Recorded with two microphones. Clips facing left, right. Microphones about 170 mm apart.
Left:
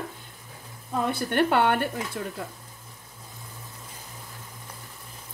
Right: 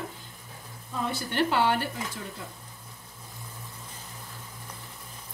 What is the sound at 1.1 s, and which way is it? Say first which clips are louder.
Speech: left 3 dB; 55° left (ahead or behind).